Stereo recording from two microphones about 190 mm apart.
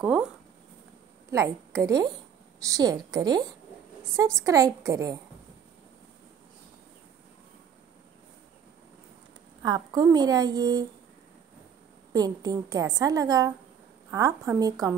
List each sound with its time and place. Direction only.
0.0 s speech: 5° right (ahead or behind)
1.8 s a woman's voice: 20° right (ahead or behind)
9.6 s a woman's voice: 20° right (ahead or behind)
12.1 s a woman's voice: 20° right (ahead or behind)